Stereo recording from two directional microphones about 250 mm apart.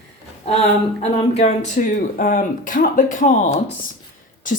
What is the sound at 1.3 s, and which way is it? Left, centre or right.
Speech, left.